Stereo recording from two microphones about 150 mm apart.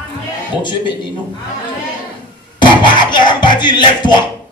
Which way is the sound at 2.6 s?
30° left (ahead or behind).